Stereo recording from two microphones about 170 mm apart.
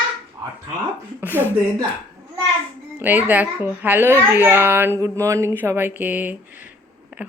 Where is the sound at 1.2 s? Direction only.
10° right (ahead or behind).